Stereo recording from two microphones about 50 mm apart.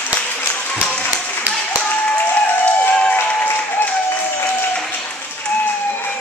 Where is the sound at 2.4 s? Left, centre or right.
Left.